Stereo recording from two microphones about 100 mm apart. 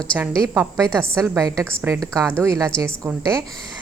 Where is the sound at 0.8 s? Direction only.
10° left (ahead or behind).